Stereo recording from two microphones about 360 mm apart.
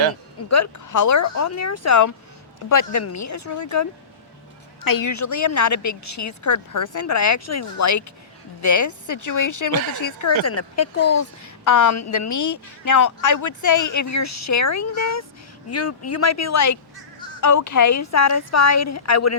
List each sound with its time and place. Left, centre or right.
0.5 s a woman's voice: left
4.9 s a woman's voice: left
10.4 s a woman's voice: left